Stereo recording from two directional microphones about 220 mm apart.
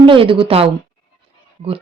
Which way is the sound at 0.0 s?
25° right (ahead or behind).